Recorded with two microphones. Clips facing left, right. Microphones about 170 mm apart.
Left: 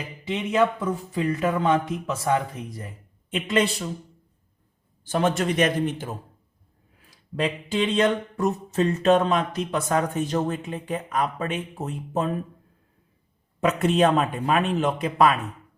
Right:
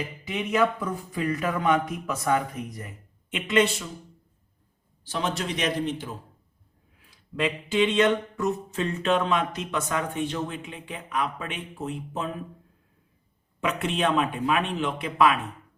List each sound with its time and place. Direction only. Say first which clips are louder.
1.1 s speech: left 3 dB; 25° left (ahead or behind)
5.0 s a man's voice: left 6 dB; 50° left (ahead or behind)
7.0 s speech: left 1 dB; 40° left (ahead or behind)
13.6 s speech: left 6 dB; 40° left (ahead or behind)